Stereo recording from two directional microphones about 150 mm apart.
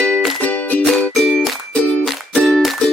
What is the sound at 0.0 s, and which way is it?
Music, 5° left (ahead or behind).